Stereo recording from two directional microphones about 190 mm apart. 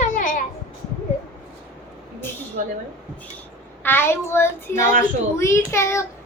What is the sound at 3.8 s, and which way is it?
A child's voice, 10° left (ahead or behind).